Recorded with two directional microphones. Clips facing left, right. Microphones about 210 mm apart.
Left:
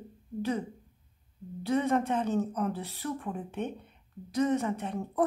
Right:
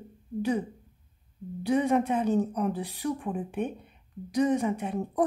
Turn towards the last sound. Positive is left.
turn(degrees=-15)  # may be behind; listen again after turning